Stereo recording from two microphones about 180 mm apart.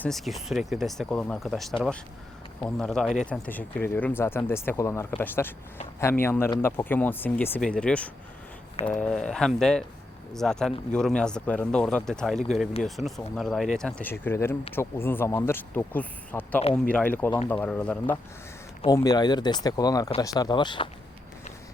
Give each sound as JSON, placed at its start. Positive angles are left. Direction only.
{"t": 0.0, "sound": "speech", "side_deg": 0}
{"t": 18.9, "sound": "speech", "side_deg": 20}